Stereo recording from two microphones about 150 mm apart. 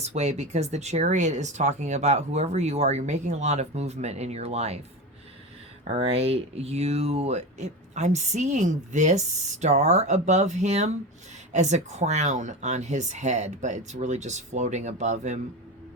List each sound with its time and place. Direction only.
0.0 s speech: 45° right (ahead or behind)
5.9 s speech: 45° right (ahead or behind)